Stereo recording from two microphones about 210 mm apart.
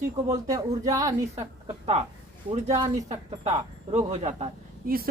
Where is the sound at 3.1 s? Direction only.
30° right (ahead or behind).